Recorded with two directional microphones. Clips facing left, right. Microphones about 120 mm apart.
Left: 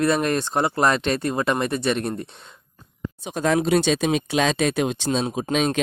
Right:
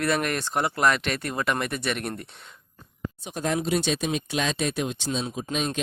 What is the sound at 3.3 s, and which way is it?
Speech, 90° left.